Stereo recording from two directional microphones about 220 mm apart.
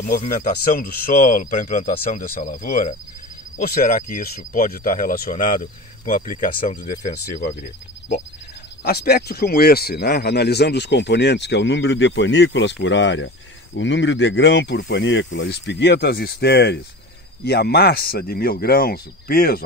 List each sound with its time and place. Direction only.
0.0 s speech: 35° left (ahead or behind)
8.8 s speech: 45° left (ahead or behind)